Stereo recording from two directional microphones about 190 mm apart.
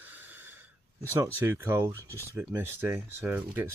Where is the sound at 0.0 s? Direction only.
10° right (ahead or behind).